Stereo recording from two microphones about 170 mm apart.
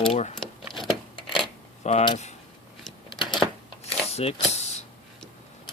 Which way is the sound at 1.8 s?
40° left (ahead or behind).